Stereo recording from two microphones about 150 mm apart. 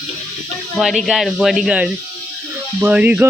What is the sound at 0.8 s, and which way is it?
Speech, centre (ahead or behind).